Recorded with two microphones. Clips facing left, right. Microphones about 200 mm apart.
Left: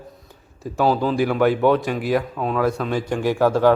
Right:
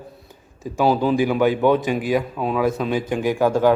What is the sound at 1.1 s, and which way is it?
Speech, centre (ahead or behind).